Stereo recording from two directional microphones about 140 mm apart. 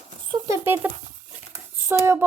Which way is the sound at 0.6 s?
15° right (ahead or behind).